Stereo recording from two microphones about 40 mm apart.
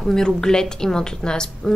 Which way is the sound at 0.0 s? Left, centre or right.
Centre.